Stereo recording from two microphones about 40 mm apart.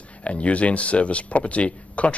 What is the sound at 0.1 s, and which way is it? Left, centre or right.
Speech, left.